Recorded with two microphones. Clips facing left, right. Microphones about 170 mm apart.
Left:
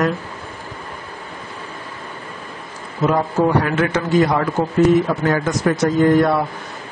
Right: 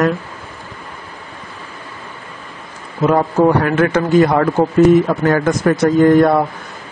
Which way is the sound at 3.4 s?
55° right (ahead or behind).